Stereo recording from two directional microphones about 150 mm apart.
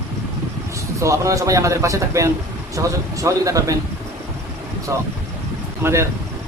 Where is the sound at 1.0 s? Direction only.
20° right (ahead or behind).